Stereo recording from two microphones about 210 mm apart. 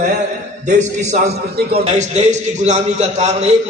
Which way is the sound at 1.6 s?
50° right (ahead or behind).